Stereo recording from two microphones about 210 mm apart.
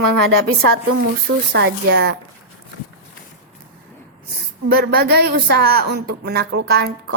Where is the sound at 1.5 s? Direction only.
50° right (ahead or behind).